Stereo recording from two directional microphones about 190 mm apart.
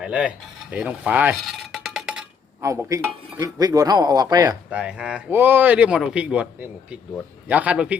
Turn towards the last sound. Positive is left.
turn(degrees=-5)  # may be behind; listen again after turning